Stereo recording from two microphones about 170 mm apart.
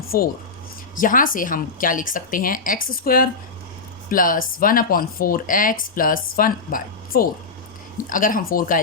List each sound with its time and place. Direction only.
0.1 s a woman's voice: 60° left (ahead or behind)